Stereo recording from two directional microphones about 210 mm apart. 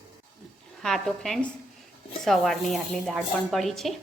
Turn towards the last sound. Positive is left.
turn(degrees=0)  # may be behind; listen again after turning